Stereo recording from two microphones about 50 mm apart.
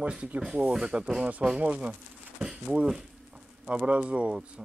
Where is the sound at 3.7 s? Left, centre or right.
Right.